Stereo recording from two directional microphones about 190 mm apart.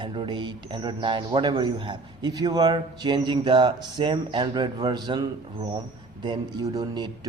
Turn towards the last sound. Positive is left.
turn(degrees=-20)  # may be behind; listen again after turning